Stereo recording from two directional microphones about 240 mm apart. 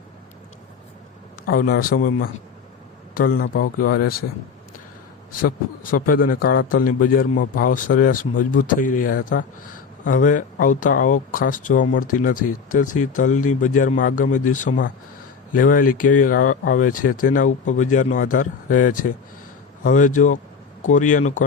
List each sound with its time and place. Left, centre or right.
1.9 s a man's voice: left
5.3 s a man's voice: left